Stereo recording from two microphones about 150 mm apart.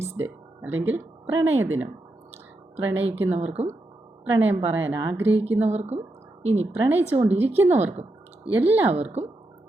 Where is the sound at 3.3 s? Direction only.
45° right (ahead or behind).